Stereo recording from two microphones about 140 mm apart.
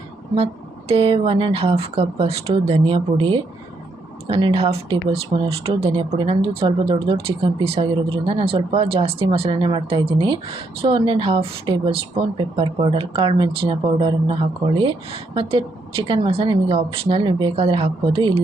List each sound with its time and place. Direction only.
0.9 s speech: 45° right (ahead or behind)